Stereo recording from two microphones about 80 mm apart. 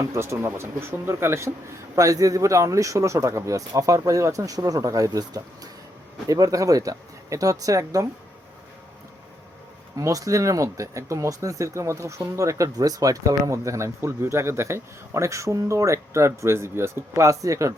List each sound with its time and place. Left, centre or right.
0.0 s speech: right
2.0 s a man's voice: right
10.0 s speech: right